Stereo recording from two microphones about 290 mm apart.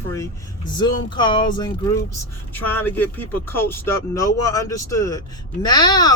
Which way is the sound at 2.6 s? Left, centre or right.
Centre.